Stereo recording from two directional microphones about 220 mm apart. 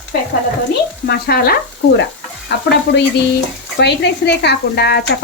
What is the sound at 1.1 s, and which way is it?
Speech, 45° left (ahead or behind).